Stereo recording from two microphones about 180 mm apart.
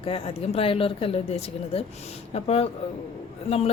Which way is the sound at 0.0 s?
30° left (ahead or behind).